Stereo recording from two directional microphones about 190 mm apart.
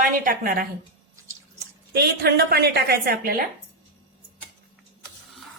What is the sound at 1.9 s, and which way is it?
A woman's voice, 55° right (ahead or behind).